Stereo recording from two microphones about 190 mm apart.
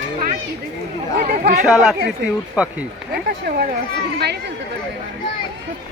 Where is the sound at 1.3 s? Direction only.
50° right (ahead or behind).